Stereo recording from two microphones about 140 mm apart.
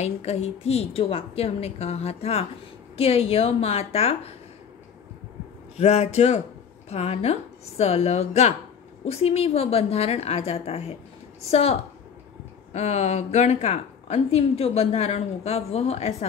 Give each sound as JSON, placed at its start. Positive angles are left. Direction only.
{"t": 0.0, "sound": "speech", "side_deg": 50}
{"t": 5.8, "sound": "speech", "side_deg": 50}
{"t": 12.7, "sound": "speech", "side_deg": 50}